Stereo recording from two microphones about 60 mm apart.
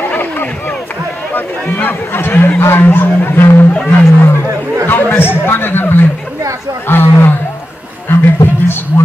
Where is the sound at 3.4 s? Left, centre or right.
Left.